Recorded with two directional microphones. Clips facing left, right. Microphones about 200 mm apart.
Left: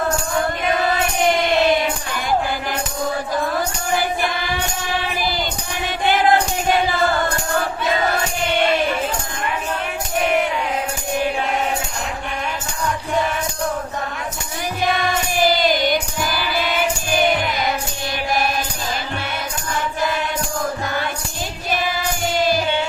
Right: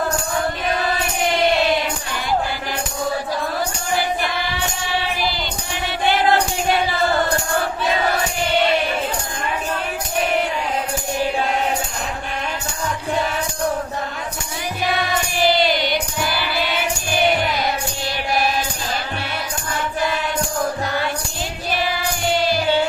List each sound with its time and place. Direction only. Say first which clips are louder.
15.4 s music: even; 45° left (ahead or behind)